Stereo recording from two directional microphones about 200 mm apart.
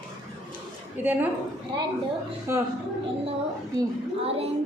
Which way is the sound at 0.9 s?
10° right (ahead or behind).